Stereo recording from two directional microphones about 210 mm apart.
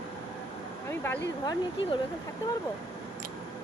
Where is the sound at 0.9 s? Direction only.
10° left (ahead or behind).